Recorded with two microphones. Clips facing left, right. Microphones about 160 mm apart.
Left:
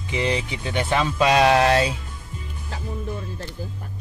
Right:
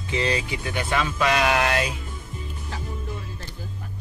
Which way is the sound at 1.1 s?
30° left (ahead or behind).